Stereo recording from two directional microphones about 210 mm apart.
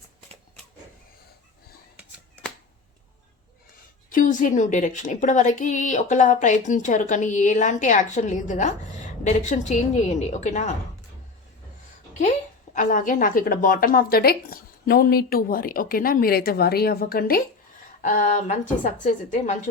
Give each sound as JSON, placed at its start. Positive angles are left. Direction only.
{"t": 4.1, "sound": "a woman's voice", "side_deg": 40}
{"t": 12.7, "sound": "a woman's voice", "side_deg": 40}